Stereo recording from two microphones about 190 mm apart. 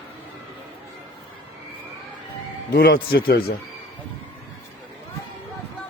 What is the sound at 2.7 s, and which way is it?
Speech, 55° left (ahead or behind).